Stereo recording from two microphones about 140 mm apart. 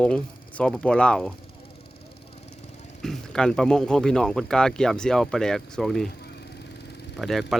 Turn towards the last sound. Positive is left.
turn(degrees=0)  # may be behind; listen again after turning